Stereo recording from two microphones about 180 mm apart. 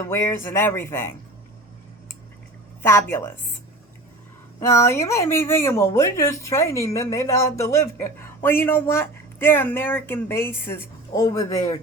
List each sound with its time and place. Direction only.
0.1 s speech: 15° left (ahead or behind)
2.8 s speech: 15° left (ahead or behind)
4.6 s speech: 15° left (ahead or behind)